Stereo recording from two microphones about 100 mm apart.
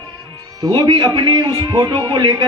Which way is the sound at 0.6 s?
50° right (ahead or behind).